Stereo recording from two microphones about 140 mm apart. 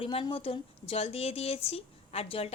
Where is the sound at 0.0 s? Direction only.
40° left (ahead or behind).